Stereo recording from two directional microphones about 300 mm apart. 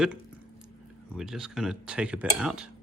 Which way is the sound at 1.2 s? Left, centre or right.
Centre.